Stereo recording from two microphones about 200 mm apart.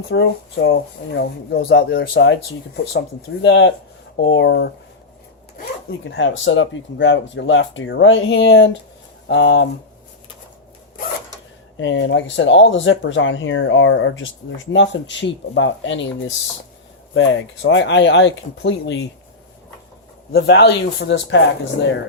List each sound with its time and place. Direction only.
0.1 s speech: 65° left (ahead or behind)
11.8 s speech: 70° left (ahead or behind)
20.3 s speech: 55° left (ahead or behind)